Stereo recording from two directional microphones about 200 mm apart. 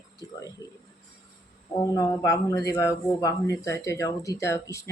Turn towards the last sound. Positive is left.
turn(degrees=15)  # may be behind; listen again after turning